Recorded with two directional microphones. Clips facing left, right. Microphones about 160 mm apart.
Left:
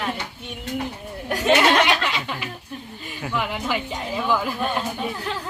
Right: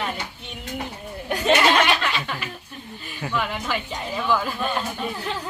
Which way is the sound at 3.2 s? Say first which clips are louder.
Even; 10° left (ahead or behind).